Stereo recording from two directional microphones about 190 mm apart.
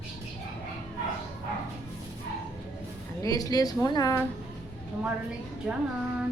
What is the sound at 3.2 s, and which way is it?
Speech, 20° left (ahead or behind).